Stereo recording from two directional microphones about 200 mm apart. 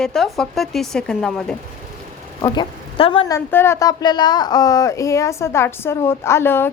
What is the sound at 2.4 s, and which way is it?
Speech, 20° left (ahead or behind).